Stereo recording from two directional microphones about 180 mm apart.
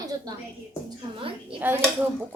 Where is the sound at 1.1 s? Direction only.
30° right (ahead or behind).